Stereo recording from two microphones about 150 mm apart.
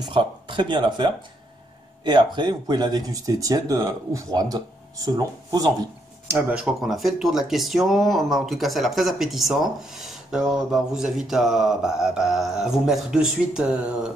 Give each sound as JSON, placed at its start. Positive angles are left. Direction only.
{"t": 0.0, "sound": "speech", "side_deg": -30}
{"t": 6.3, "sound": "speech", "side_deg": -5}